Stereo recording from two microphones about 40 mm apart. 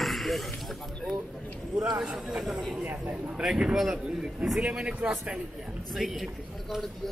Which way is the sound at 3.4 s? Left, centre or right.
Centre.